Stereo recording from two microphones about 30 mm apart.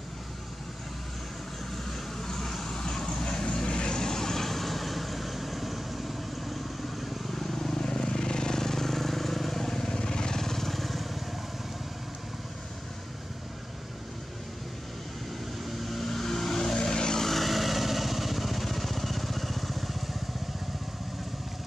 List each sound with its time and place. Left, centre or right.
1.9 s vehicle: centre
10.4 s vehicle: centre
15.8 s vehicle: centre; by 17.2 s left
17.2 s vehicle: centre